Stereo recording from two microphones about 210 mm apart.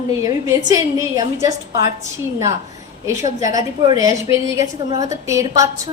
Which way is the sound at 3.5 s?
15° right (ahead or behind).